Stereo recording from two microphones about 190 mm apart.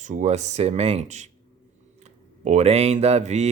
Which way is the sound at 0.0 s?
40° right (ahead or behind).